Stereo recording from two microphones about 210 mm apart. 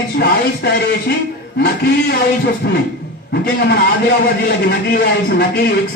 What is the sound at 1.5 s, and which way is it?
Speech, 50° left (ahead or behind).